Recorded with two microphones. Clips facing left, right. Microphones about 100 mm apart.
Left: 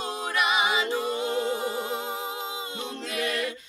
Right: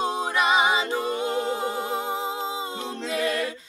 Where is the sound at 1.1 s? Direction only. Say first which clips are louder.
Right 1 dB; 25° right (ahead or behind).